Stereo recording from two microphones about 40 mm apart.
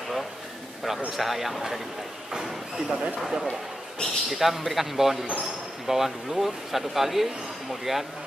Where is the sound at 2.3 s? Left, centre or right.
Centre.